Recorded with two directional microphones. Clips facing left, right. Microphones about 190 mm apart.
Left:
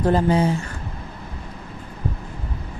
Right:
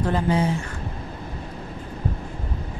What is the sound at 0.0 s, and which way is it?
Speech, 35° left (ahead or behind).